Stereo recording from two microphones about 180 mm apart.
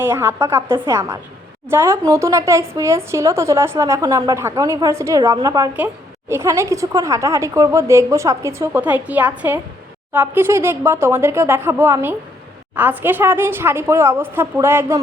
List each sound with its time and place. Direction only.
0.0 s speech: 10° right (ahead or behind)